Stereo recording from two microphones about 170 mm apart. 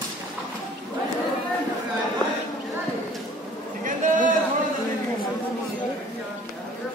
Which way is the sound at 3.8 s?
50° right (ahead or behind).